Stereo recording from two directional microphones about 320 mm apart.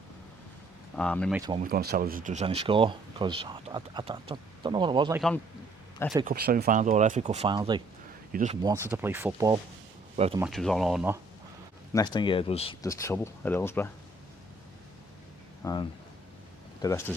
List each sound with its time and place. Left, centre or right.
0.9 s speech: centre
1.4 s speech: centre
1.6 s speech: right; by 5.2 s centre
6.2 s speech: right
8.6 s speech: centre
10.4 s speech: centre
11.9 s speech: centre
15.6 s speech: centre